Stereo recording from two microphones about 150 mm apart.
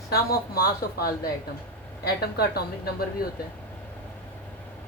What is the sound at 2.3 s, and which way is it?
Speech, 90° left.